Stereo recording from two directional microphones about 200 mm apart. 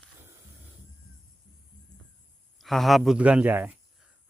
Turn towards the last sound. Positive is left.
turn(degrees=-10)  # may be behind; listen again after turning